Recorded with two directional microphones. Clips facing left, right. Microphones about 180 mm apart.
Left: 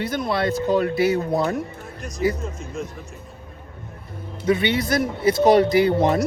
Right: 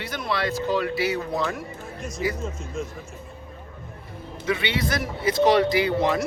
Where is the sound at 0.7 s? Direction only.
50° left (ahead or behind).